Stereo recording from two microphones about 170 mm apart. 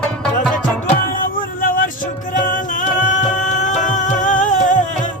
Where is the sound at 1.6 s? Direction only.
55° left (ahead or behind).